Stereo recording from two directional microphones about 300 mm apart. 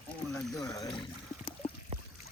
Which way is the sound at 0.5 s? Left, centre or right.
Centre.